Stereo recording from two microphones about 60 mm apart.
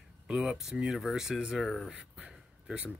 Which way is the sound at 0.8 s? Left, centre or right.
Centre.